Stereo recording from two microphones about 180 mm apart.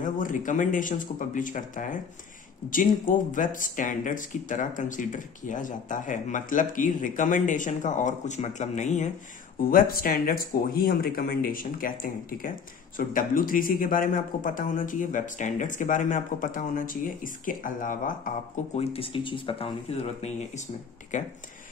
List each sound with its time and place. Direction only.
0.0 s speech: 45° left (ahead or behind)
3.1 s speech: 45° left (ahead or behind)
9.6 s speech: 55° left (ahead or behind)
18.8 s speech: 30° left (ahead or behind)